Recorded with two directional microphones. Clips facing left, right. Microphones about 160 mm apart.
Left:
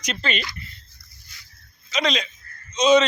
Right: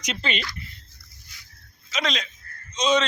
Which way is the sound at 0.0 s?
20° right (ahead or behind).